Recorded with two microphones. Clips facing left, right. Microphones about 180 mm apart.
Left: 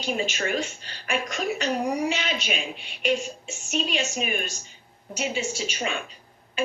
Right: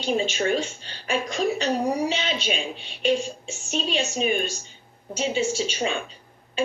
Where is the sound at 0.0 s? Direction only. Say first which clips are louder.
Right 4 dB; 30° right (ahead or behind).